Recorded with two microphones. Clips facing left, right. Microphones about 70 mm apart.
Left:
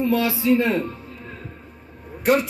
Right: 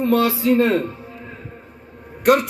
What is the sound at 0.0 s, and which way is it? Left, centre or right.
Speech, right.